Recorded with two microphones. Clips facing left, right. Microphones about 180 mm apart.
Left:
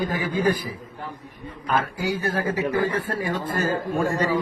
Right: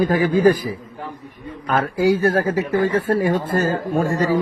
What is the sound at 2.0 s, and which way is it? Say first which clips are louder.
A man's voice: right 9 dB; 40° right (ahead or behind).